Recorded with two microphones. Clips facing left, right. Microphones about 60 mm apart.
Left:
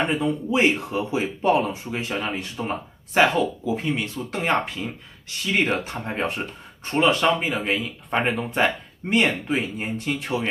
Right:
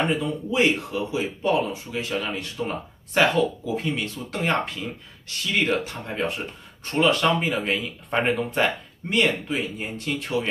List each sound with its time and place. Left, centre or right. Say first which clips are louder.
0.1 s speech: left 2 dB; centre
5.5 s speech: left 1 dB; left
6.8 s speech: left 1 dB; centre
9.1 s speech: left 1 dB; left